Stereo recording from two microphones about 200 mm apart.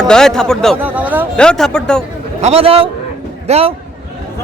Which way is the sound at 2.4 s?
30° right (ahead or behind).